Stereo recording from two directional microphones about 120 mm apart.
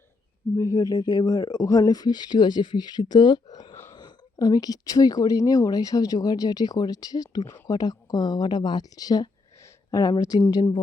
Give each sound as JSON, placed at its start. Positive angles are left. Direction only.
{"t": 0.5, "sound": "speech", "side_deg": 30}